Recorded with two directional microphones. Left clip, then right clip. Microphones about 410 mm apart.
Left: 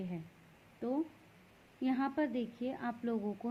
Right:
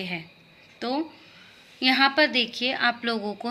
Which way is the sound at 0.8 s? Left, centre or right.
Centre.